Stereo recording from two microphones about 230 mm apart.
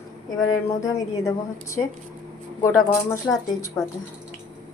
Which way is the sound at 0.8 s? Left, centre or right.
Centre.